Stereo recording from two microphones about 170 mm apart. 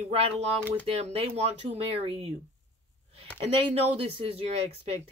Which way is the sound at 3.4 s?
35° right (ahead or behind).